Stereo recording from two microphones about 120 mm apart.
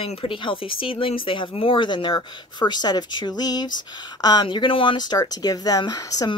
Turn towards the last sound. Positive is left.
turn(degrees=30)  # may be behind; listen again after turning